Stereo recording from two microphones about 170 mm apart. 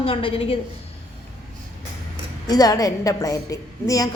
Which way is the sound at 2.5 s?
20° left (ahead or behind).